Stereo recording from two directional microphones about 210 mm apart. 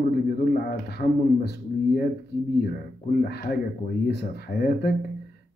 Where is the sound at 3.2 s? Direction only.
50° left (ahead or behind).